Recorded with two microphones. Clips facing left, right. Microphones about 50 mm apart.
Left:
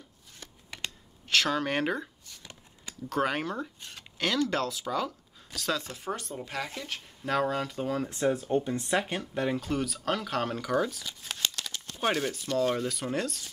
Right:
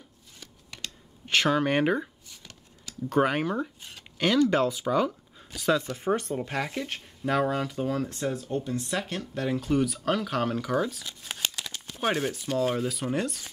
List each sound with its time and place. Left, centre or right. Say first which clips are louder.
1.2 s speech: right 3 dB; centre
2.4 s a sound: left 2 dB; left
3.1 s speech: right 5 dB; centre
5.9 s speech: right 8 dB; right
7.2 s speech: right 2 dB; centre
9.6 s speech: right 5 dB; centre